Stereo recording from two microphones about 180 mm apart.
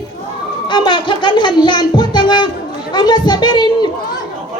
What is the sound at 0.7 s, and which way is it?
Speech, 25° left (ahead or behind).